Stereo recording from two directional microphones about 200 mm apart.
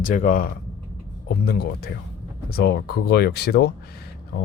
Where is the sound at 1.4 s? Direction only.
50° left (ahead or behind).